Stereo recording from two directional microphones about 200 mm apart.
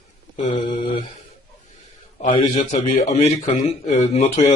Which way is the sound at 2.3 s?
30° left (ahead or behind).